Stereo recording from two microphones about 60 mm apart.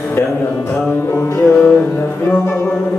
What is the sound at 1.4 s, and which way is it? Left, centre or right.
Music, centre.